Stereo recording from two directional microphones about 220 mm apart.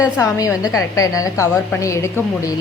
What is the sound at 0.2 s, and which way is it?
A woman's voice, 15° left (ahead or behind).